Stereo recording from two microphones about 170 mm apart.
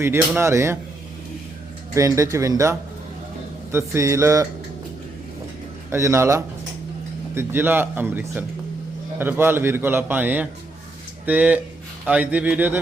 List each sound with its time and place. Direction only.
0.0 s a man's voice: 15° right (ahead or behind)
1.9 s a man's voice: 20° right (ahead or behind)
5.9 s a man's voice: 15° right (ahead or behind)